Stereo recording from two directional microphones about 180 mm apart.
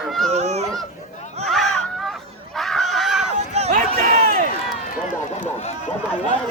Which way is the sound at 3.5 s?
35° right (ahead or behind).